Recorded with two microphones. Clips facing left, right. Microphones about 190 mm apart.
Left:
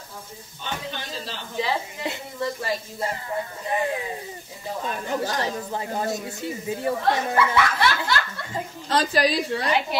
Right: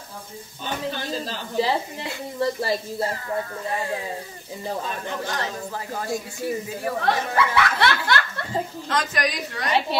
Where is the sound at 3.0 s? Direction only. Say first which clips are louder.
Right 2 dB; 20° left (ahead or behind).